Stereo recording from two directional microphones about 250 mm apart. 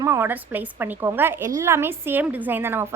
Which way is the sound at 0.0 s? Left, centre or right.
Centre.